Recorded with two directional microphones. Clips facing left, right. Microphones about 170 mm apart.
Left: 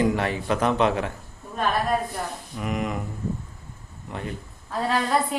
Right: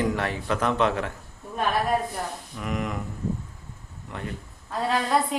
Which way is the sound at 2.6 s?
15° left (ahead or behind).